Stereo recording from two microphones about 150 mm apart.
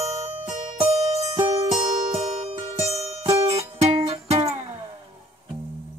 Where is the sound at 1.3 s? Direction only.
20° right (ahead or behind).